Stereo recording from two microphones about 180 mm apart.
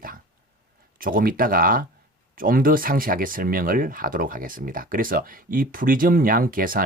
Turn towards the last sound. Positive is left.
turn(degrees=-50)  # may be behind; listen again after turning